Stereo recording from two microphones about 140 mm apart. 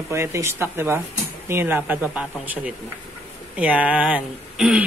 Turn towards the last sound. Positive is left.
turn(degrees=-10)  # may be behind; listen again after turning